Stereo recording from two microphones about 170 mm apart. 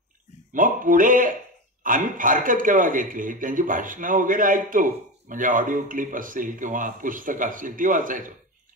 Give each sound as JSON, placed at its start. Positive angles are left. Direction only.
{"t": 0.5, "sound": "a man's voice", "side_deg": -50}